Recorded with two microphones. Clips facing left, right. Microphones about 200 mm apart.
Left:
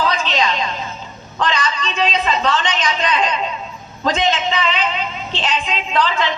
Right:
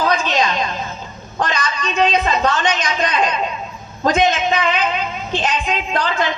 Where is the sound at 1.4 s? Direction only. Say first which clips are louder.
Left 1 dB; 50° right (ahead or behind).